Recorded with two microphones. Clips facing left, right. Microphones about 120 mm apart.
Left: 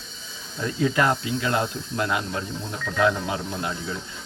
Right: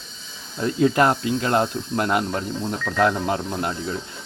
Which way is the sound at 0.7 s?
45° right (ahead or behind).